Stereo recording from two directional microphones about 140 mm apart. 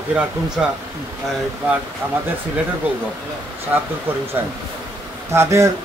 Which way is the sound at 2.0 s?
15° right (ahead or behind).